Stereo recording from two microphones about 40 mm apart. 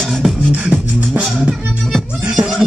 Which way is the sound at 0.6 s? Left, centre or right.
Right.